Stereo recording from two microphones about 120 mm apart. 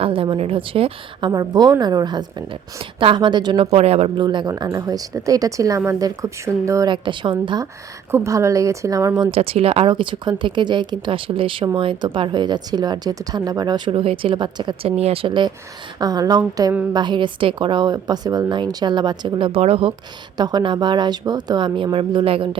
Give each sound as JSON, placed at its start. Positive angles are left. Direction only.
{"t": 0.0, "sound": "speech", "side_deg": -50}
{"t": 1.3, "sound": "speech", "side_deg": -30}
{"t": 3.7, "sound": "speech", "side_deg": -55}
{"t": 4.2, "sound": "speech", "side_deg": -40}
{"t": 6.8, "sound": "speech", "side_deg": -40}
{"t": 8.1, "sound": "speech", "side_deg": -25}
{"t": 9.3, "sound": "speech", "side_deg": -55}
{"t": 14.0, "sound": "speech", "side_deg": -50}
{"t": 20.3, "sound": "speech", "side_deg": -35}
{"t": 21.9, "sound": "speech", "side_deg": -50}